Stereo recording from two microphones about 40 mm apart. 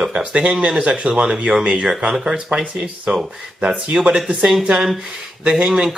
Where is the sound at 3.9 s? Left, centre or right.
Right.